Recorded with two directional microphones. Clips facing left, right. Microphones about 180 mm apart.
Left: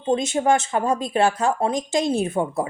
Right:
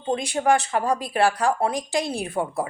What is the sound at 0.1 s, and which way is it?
Speech, 20° left (ahead or behind).